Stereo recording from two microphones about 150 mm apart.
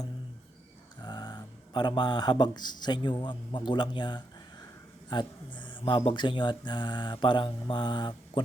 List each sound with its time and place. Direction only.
1.0 s speech: 30° left (ahead or behind)